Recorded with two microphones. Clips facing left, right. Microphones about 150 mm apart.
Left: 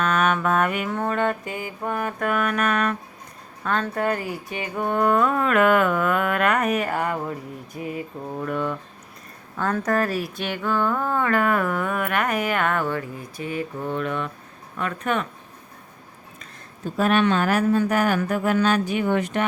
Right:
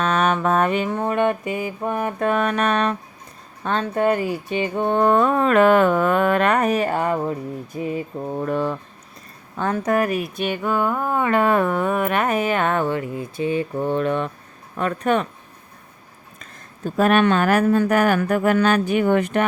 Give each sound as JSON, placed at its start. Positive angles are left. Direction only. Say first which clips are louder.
{"t": 0.0, "sound": "music", "louder": "right 2 dB", "side_deg": -30}
{"t": 0.9, "sound": "speech", "louder": "right 3 dB", "side_deg": -20}
{"t": 7.8, "sound": "mantra", "louder": "right 4 dB", "side_deg": -25}
{"t": 9.6, "sound": "speech", "louder": "right 2 dB", "side_deg": -20}
{"t": 14.8, "sound": "mantra", "louder": "right 5 dB", "side_deg": -35}
{"t": 17.0, "sound": "speech", "louder": "right 3 dB", "side_deg": -55}